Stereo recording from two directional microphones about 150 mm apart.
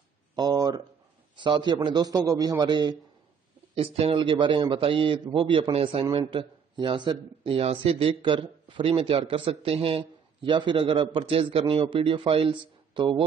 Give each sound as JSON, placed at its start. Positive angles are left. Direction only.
{"t": 0.4, "sound": "a sound", "side_deg": -25}
{"t": 1.3, "sound": "a man's voice", "side_deg": -30}
{"t": 3.7, "sound": "speech", "side_deg": -40}